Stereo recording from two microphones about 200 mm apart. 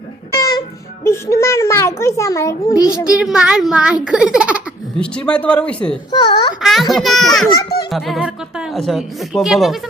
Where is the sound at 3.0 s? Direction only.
5° right (ahead or behind).